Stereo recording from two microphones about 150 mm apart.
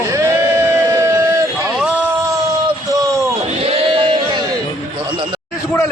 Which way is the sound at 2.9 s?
20° right (ahead or behind).